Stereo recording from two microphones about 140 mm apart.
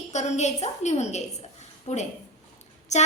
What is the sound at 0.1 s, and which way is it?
A woman's voice, 55° left (ahead or behind).